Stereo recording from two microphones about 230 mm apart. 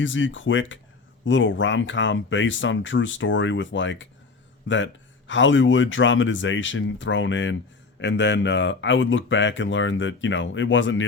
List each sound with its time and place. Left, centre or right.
0.0 s speech: left